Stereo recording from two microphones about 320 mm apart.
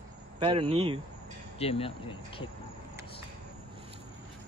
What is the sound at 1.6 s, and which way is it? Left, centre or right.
Speech, centre.